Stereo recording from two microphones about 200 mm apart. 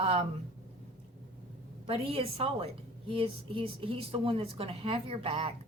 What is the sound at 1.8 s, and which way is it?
A woman's voice, 30° right (ahead or behind).